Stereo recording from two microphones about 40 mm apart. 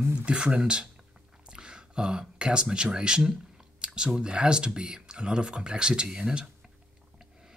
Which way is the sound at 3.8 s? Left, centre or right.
Right.